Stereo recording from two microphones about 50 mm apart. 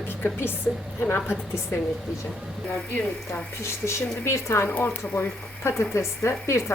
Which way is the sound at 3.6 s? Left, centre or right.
Left.